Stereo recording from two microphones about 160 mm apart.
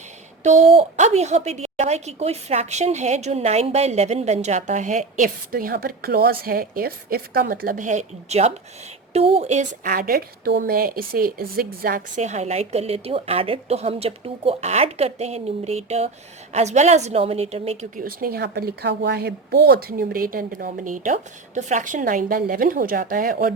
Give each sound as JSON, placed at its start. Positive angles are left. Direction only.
{"t": 0.4, "sound": "a woman's voice", "side_deg": -45}
{"t": 18.0, "sound": "a woman's voice", "side_deg": -70}